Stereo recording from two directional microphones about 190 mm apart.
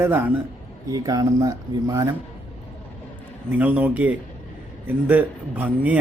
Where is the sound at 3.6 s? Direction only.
10° right (ahead or behind).